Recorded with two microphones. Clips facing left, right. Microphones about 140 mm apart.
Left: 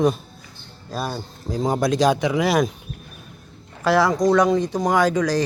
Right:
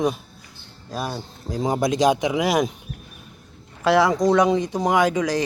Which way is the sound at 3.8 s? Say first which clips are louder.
Even; 25° right (ahead or behind).